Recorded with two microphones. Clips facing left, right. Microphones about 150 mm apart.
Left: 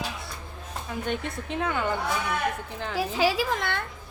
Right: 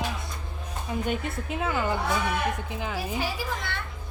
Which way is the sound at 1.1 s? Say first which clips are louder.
Left 3 dB; 5° right (ahead or behind).